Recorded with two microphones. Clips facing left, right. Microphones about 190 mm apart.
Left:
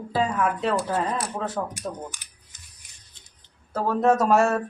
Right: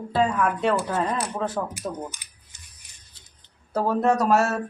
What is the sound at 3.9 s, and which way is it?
Speech, centre (ahead or behind).